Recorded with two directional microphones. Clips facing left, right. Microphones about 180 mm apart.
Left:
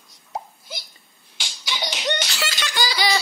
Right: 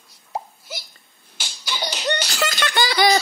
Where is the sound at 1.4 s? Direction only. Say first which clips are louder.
Right 1 dB; centre (ahead or behind).